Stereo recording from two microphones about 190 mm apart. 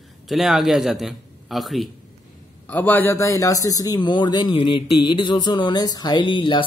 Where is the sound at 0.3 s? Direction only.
Centre (ahead or behind).